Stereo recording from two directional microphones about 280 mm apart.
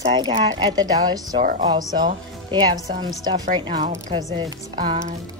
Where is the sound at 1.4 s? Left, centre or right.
Right.